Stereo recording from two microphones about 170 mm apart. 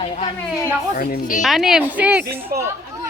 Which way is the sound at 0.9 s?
55° left (ahead or behind).